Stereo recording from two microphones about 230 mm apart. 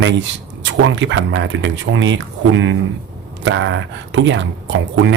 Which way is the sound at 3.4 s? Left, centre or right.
Right.